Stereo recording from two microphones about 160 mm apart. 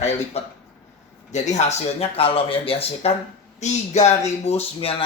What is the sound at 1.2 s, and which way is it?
Speech, 45° left (ahead or behind).